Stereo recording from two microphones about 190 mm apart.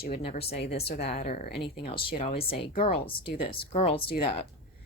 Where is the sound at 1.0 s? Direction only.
35° left (ahead or behind).